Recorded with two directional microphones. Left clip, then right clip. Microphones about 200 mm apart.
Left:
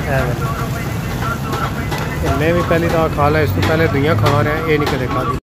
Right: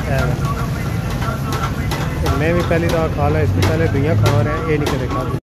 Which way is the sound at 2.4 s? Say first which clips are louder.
Left 2 dB; 10° left (ahead or behind).